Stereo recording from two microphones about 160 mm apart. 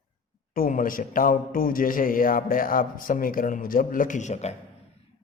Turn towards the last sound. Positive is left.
turn(degrees=45)  # may be behind; listen again after turning